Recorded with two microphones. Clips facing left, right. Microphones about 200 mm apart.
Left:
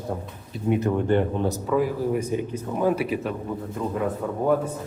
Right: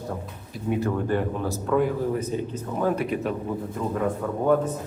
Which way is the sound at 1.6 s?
Centre (ahead or behind).